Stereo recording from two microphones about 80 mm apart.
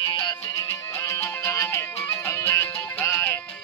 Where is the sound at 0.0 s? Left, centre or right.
Left.